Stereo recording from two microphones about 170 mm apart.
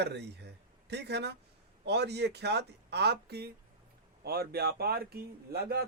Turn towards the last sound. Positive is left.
turn(degrees=-65)  # may be behind; listen again after turning